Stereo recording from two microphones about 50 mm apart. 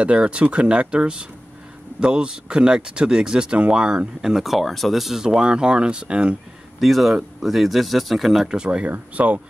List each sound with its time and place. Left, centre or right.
0.0 s speech: right; by 5.2 s centre
5.2 s speech: centre
6.8 s speech: centre
8.5 s speech: right